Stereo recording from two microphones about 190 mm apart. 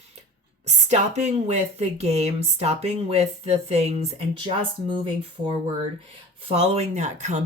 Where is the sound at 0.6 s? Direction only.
35° right (ahead or behind).